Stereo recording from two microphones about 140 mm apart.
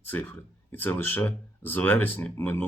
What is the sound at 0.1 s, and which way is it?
Speech, 15° left (ahead or behind).